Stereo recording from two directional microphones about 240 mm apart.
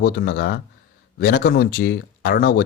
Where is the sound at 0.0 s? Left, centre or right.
Left.